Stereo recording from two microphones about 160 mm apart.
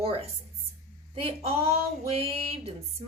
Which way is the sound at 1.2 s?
35° right (ahead or behind).